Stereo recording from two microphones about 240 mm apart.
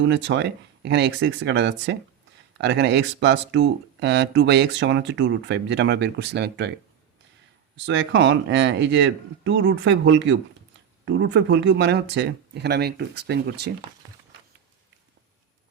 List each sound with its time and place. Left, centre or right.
0.0 s speech: right
7.9 s speech: right